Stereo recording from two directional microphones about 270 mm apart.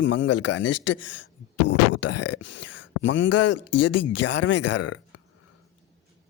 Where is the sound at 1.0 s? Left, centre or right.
Left.